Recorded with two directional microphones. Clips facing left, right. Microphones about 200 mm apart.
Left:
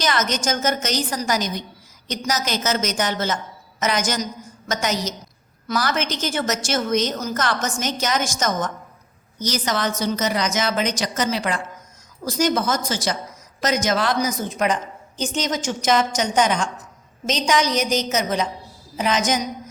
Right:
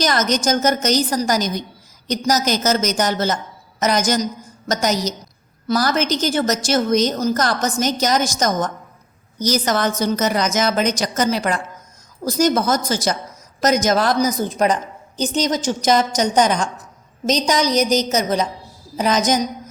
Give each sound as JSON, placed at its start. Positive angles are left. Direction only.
{"t": 0.0, "sound": "a woman's voice", "side_deg": -40}